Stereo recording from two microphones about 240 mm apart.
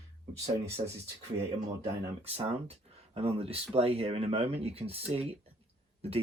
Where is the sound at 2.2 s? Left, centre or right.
Right.